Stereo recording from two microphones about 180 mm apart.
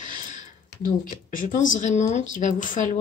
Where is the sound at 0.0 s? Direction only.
45° left (ahead or behind).